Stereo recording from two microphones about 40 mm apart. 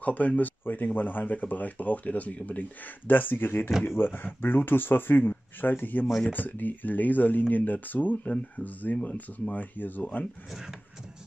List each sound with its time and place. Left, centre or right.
0.0 s speech: left
10.5 s speech: centre